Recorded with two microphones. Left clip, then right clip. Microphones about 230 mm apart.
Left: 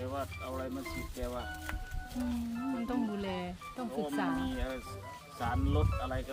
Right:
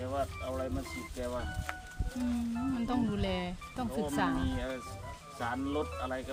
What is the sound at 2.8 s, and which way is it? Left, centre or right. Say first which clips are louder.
A woman's voice: right 4 dB; right.